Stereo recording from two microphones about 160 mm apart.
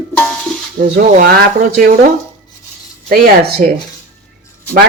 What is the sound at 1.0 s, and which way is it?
Speech, 60° right (ahead or behind).